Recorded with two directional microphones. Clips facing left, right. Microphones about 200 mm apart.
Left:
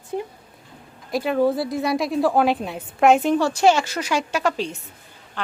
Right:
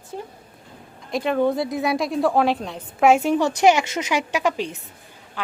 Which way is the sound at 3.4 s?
20° right (ahead or behind).